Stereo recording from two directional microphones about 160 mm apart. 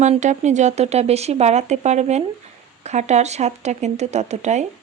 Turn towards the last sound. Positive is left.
turn(degrees=-45)  # may be behind; listen again after turning